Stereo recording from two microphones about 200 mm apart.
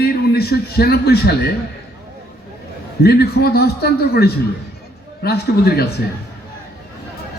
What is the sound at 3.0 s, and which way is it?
A man's voice, 50° left (ahead or behind).